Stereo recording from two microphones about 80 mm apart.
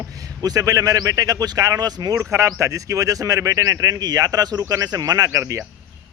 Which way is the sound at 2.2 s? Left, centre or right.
Right.